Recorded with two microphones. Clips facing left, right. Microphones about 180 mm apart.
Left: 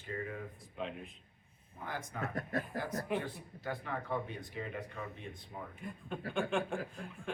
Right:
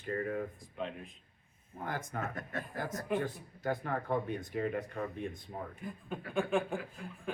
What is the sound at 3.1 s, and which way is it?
Speech, 45° right (ahead or behind).